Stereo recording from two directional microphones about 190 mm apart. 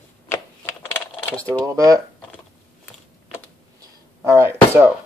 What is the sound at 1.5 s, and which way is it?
Speech, 15° right (ahead or behind).